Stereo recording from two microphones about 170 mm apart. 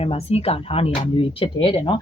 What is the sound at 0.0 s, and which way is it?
Speech, 35° left (ahead or behind).